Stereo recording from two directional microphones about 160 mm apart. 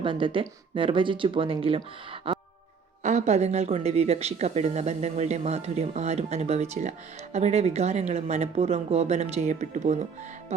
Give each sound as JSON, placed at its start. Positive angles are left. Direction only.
{"t": 0.0, "sound": "speech", "side_deg": -30}
{"t": 2.3, "sound": "music", "side_deg": -35}
{"t": 3.0, "sound": "speech", "side_deg": -50}